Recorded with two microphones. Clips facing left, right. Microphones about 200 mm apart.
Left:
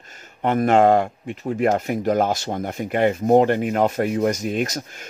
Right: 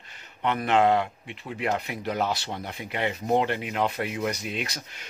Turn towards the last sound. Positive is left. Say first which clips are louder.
# left 10 dB
turn(degrees=45)  # may be behind; listen again after turning